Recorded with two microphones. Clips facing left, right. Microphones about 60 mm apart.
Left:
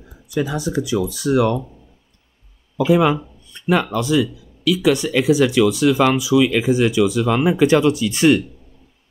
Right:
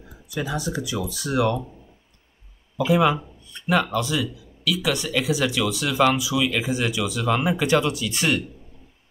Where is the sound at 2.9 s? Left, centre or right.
Centre.